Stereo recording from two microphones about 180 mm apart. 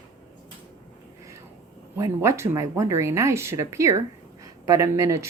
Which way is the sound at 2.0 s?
15° right (ahead or behind).